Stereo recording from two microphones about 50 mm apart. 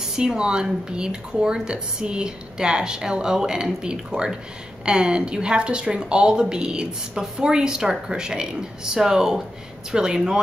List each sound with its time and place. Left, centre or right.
0.0 s a woman's voice: centre